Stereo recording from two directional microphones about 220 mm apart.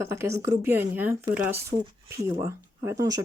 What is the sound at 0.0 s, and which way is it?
Speech, 15° right (ahead or behind).